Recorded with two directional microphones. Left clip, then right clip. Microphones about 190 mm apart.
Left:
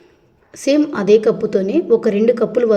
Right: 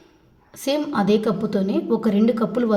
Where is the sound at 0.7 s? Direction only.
10° left (ahead or behind).